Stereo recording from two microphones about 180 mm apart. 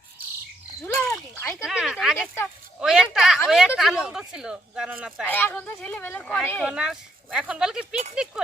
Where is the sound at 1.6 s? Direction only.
5° right (ahead or behind).